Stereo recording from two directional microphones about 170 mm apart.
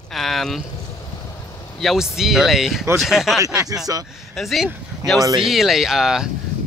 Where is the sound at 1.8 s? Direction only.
Centre (ahead or behind).